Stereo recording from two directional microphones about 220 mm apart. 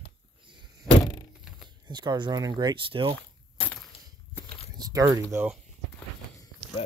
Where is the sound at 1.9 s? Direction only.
20° right (ahead or behind).